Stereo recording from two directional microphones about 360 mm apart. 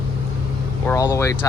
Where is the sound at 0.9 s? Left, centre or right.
Centre.